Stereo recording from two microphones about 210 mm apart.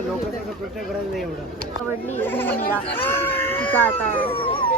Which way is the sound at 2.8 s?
25° left (ahead or behind).